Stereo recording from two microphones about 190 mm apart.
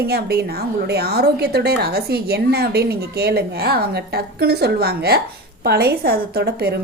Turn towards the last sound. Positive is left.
turn(degrees=-55)  # may be behind; listen again after turning